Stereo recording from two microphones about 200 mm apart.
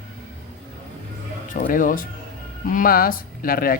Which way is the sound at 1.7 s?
45° left (ahead or behind).